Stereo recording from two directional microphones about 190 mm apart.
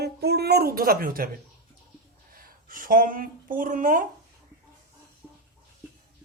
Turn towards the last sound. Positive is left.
turn(degrees=0)  # may be behind; listen again after turning